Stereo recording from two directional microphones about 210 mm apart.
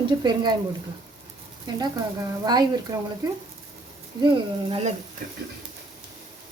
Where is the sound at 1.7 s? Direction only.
20° right (ahead or behind).